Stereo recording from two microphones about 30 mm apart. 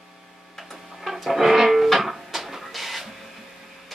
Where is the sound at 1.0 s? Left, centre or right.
Centre.